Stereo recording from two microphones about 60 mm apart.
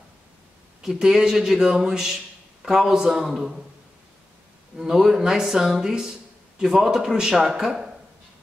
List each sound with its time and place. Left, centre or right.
0.8 s speech: centre
4.7 s speech: centre